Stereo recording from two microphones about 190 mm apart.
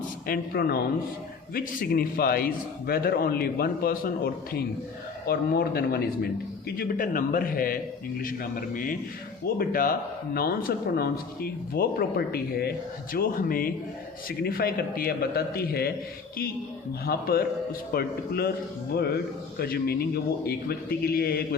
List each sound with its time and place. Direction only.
0.3 s a man's voice: 55° left (ahead or behind)
17.1 s a man's voice: 55° left (ahead or behind)
19.5 s a man's voice: 55° left (ahead or behind)